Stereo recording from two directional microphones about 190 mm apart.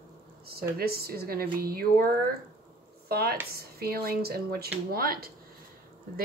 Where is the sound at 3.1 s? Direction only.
55° right (ahead or behind).